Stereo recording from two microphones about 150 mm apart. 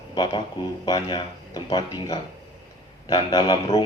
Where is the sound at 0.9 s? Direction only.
30° left (ahead or behind).